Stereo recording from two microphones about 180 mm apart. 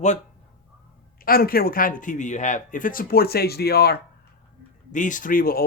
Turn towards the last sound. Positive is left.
turn(degrees=50)  # may be behind; listen again after turning